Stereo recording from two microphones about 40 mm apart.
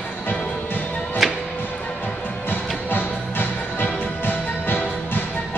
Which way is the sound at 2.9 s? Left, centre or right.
Left.